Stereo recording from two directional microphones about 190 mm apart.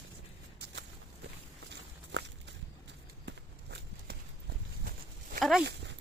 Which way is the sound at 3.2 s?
60° right (ahead or behind).